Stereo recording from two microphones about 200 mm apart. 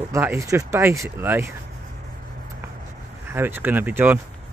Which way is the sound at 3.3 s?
10° right (ahead or behind).